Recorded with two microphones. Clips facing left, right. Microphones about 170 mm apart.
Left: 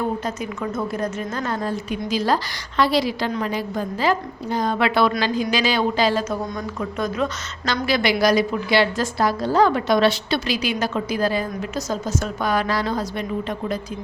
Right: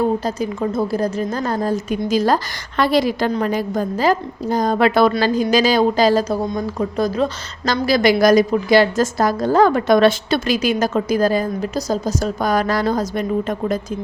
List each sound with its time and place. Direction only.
0.3 s a woman's voice: 35° right (ahead or behind)